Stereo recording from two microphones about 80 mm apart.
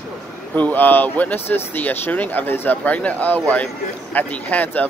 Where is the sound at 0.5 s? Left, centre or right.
Left.